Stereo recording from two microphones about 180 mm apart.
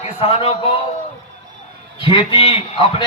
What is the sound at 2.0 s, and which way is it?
Speech, 30° left (ahead or behind).